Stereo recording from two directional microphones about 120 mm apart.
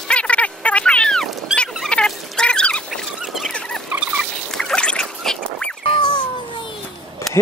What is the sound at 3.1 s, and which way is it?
Rodents, 5° right (ahead or behind).